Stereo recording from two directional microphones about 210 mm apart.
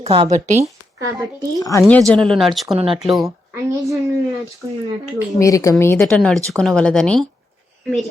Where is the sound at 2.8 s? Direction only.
25° right (ahead or behind).